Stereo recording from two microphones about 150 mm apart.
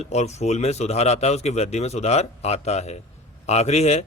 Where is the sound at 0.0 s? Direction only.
50° left (ahead or behind).